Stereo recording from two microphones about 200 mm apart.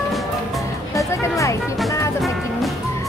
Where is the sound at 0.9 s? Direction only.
15° left (ahead or behind).